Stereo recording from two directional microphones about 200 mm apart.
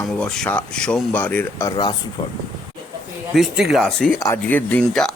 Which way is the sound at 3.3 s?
Centre (ahead or behind).